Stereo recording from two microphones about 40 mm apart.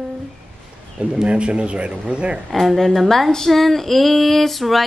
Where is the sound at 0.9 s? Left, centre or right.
Right.